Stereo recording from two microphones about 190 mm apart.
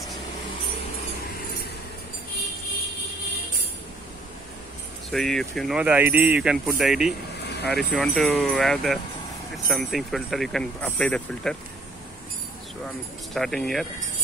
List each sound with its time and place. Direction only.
5.1 s speech: centre (ahead or behind)
7.3 s vehicle: 60° left (ahead or behind)
7.7 s speech: centre (ahead or behind)
13.3 s speech: centre (ahead or behind)